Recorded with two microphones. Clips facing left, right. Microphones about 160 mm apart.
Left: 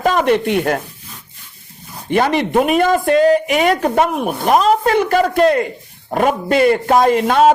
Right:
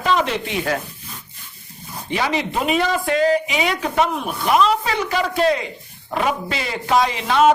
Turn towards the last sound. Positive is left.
turn(degrees=50)  # may be behind; listen again after turning